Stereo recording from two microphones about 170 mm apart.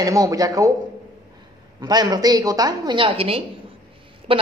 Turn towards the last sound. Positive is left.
turn(degrees=-30)  # may be behind; listen again after turning